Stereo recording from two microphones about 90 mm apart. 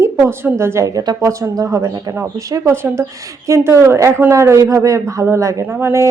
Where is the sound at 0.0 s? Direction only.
25° right (ahead or behind).